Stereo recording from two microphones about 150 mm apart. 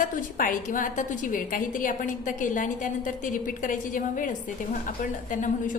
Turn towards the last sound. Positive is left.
turn(degrees=60)  # may be behind; listen again after turning